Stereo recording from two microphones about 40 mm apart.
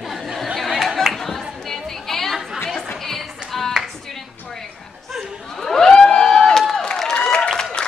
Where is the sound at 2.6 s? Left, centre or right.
Centre.